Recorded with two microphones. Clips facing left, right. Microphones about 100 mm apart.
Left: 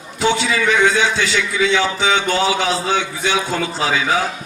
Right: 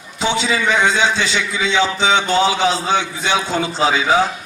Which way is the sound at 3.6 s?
25° right (ahead or behind).